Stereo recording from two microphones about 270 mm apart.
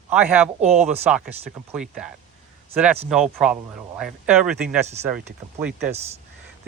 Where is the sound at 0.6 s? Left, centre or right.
Right.